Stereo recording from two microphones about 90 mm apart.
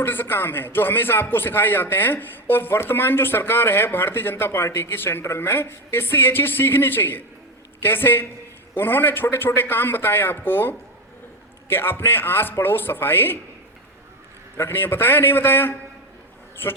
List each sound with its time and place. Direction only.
0.0 s a man's voice: 25° left (ahead or behind)
14.6 s a man's voice: 25° left (ahead or behind)